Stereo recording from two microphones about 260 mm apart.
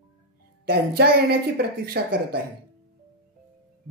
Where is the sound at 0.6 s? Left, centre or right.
Right.